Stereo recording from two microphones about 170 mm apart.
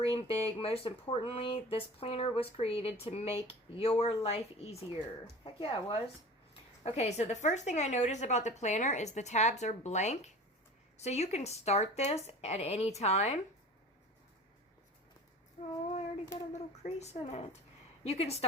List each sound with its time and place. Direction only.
0.0 s a woman's voice: 35° left (ahead or behind)
15.6 s child singing: 40° left (ahead or behind)
16.5 s speech: 40° left (ahead or behind)